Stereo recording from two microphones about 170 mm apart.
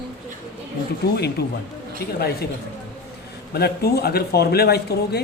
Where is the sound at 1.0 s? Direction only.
70° left (ahead or behind).